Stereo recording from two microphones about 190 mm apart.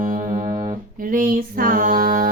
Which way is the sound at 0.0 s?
45° right (ahead or behind).